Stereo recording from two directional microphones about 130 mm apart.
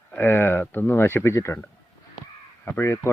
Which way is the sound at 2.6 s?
15° left (ahead or behind).